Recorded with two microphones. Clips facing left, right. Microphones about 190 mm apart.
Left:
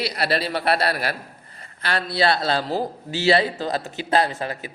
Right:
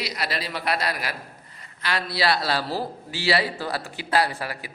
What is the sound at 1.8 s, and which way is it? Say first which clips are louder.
A man's voice: left 4 dB; 30° left (ahead or behind).